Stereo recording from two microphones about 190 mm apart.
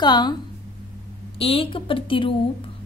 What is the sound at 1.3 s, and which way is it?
A woman's voice, 30° left (ahead or behind).